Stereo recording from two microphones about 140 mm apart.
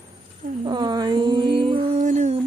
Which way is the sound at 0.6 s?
30° right (ahead or behind).